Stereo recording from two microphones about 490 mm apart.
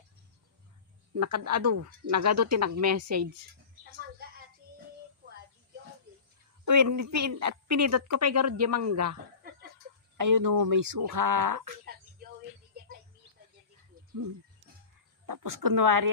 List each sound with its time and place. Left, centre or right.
1.1 s a woman's voice: right
6.7 s a woman's voice: right
10.2 s a woman's voice: right
14.0 s a sound: centre
15.3 s a woman's voice: right